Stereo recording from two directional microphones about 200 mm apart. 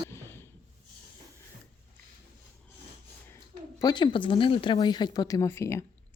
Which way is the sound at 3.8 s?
20° left (ahead or behind).